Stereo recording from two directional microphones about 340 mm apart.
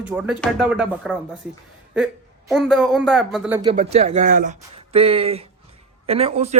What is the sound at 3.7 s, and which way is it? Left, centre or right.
Speech, centre.